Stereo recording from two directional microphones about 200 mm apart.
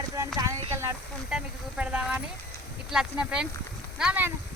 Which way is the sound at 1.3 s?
5° right (ahead or behind).